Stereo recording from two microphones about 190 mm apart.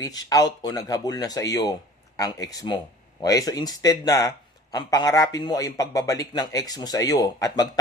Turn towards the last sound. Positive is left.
turn(degrees=20)  # may be behind; listen again after turning